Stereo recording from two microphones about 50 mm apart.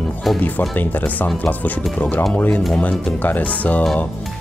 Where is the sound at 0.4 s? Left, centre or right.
Left.